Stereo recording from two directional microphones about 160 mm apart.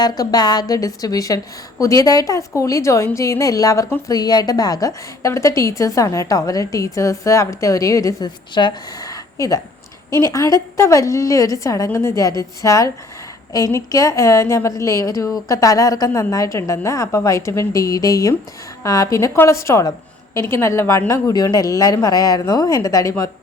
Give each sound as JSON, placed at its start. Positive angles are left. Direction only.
{"t": 0.0, "sound": "a woman's voice", "side_deg": 25}